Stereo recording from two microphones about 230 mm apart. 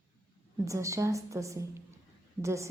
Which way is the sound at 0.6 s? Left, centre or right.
Centre.